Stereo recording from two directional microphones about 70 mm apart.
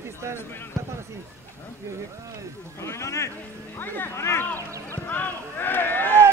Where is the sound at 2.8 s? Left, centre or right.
Left.